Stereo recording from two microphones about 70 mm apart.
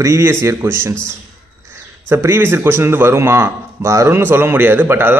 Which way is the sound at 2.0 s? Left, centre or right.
Right.